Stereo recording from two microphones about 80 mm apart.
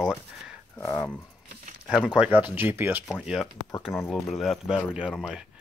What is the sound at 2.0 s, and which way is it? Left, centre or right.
Speech, centre.